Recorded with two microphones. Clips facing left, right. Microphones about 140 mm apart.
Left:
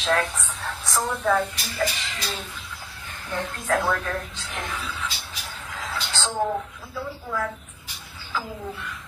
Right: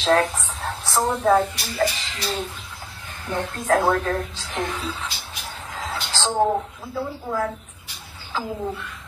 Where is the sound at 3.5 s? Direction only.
40° right (ahead or behind).